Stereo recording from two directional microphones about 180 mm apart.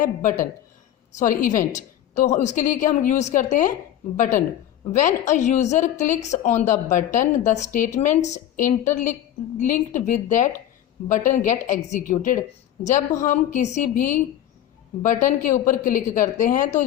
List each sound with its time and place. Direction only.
0.0 s a woman's voice: 45° left (ahead or behind)